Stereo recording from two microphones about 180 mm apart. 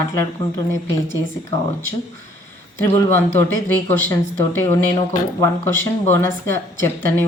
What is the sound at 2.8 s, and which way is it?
A woman's voice, 15° left (ahead or behind).